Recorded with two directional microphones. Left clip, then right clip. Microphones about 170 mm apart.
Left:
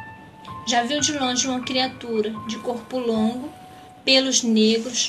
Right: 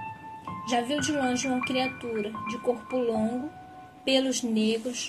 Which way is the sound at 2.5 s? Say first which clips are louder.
Left 1 dB; 50° right (ahead or behind).